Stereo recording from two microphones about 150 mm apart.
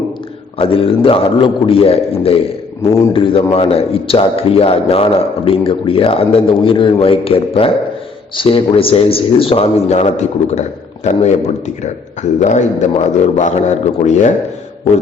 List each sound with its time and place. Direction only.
0.6 s a man's voice: 40° left (ahead or behind)